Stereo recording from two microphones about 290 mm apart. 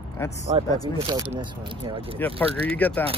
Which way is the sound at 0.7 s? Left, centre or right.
Centre.